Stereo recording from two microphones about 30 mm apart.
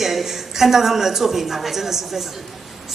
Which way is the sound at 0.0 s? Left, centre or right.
Centre.